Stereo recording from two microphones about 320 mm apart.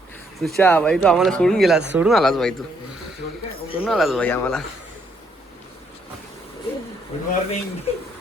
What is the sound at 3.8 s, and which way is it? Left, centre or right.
Speech, centre.